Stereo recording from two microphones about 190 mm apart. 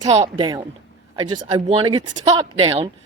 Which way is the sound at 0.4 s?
20° right (ahead or behind).